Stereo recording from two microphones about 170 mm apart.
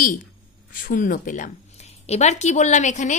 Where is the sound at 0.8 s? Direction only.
50° left (ahead or behind).